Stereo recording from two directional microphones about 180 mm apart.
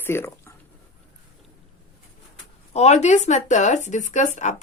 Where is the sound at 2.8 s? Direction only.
40° left (ahead or behind).